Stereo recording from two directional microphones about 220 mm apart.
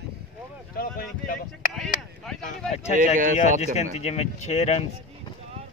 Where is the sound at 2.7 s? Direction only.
30° left (ahead or behind).